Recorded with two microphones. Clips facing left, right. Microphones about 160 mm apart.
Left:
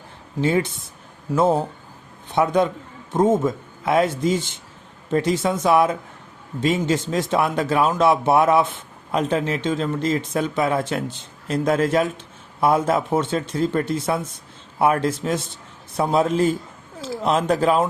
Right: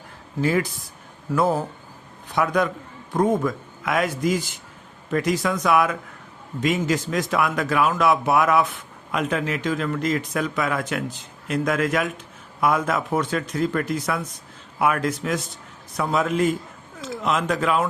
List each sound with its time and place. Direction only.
0.4 s a man's voice: 25° left (ahead or behind)